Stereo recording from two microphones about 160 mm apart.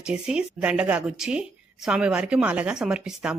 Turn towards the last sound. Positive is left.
turn(degrees=-5)  # may be behind; listen again after turning